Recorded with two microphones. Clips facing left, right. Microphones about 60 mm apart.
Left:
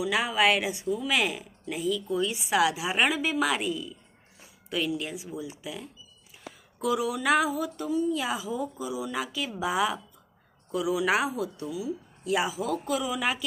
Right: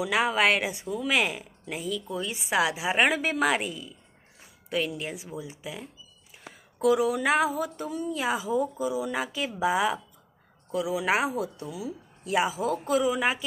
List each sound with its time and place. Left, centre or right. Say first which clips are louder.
0.0 s speech: right 1 dB; right
6.8 s speech: right 4 dB; right